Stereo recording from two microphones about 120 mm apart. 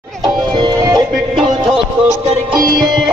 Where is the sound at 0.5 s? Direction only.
40° right (ahead or behind).